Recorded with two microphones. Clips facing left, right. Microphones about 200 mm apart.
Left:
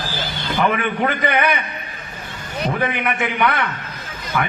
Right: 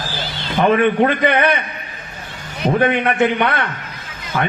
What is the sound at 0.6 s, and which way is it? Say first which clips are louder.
Speech: right 6 dB; 25° right (ahead or behind).